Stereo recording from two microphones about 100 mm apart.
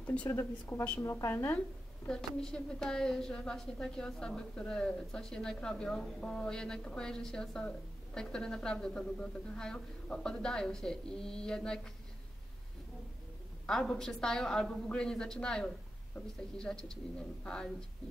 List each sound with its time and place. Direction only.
0.0 s speech: 15° left (ahead or behind)
0.3 s speech: 30° left (ahead or behind)
2.0 s a woman's voice: 10° left (ahead or behind)
13.7 s a woman's voice: 5° left (ahead or behind)